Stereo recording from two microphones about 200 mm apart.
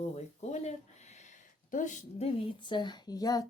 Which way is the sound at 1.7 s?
40° left (ahead or behind).